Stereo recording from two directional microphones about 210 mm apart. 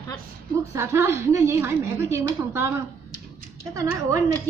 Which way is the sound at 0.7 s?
10° right (ahead or behind).